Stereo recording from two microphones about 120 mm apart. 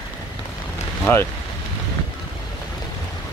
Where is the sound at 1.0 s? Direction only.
20° left (ahead or behind).